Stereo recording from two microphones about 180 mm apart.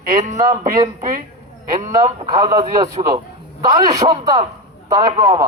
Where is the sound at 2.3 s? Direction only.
20° right (ahead or behind).